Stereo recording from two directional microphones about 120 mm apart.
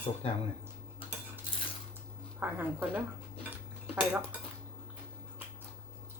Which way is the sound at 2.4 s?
15° right (ahead or behind).